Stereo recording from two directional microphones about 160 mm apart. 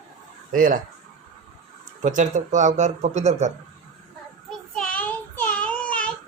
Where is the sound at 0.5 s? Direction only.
60° right (ahead or behind).